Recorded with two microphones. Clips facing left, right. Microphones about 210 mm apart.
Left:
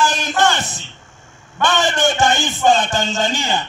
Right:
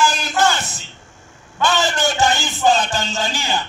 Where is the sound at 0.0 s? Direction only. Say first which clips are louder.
Left 1 dB; 20° left (ahead or behind).